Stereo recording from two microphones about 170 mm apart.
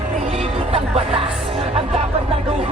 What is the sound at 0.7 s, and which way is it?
Music, 35° right (ahead or behind).